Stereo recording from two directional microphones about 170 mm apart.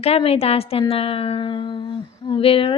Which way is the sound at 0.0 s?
35° left (ahead or behind).